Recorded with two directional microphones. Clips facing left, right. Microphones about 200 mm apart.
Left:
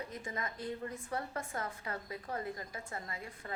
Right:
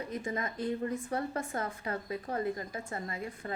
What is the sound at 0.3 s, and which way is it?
A woman's voice, 25° right (ahead or behind).